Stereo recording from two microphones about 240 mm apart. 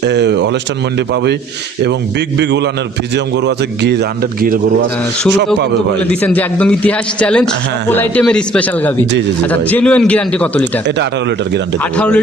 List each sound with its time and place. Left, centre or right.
0.0 s a man's voice: right
6.0 s a man's voice: centre
10.8 s a man's voice: right
11.8 s a man's voice: centre